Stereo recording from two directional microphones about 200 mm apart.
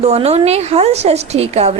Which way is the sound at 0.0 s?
30° right (ahead or behind).